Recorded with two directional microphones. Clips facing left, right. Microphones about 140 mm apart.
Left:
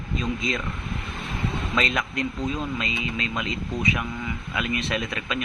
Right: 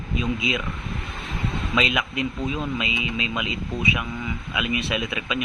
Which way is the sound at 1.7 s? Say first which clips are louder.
Right 2 dB; 10° right (ahead or behind).